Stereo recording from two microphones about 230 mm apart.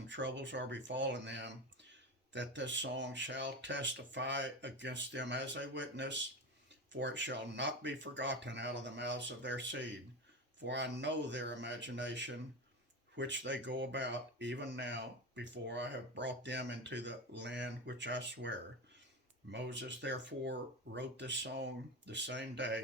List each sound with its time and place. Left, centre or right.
0.1 s speech: right